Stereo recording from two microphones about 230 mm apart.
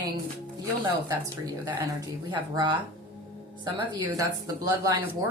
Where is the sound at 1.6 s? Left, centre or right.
Centre.